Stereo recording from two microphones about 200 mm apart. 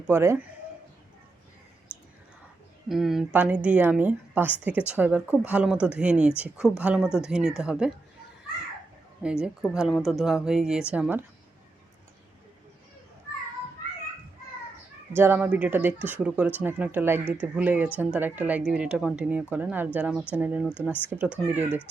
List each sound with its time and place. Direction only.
0.1 s speech: 10° right (ahead or behind)
2.9 s speech: centre (ahead or behind)
9.2 s speech: 5° right (ahead or behind)
15.1 s speech: 10° right (ahead or behind)